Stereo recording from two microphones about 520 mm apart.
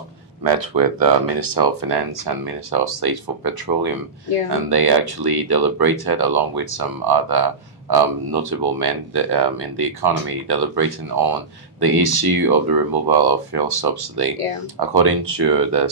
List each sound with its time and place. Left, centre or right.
0.4 s speech: right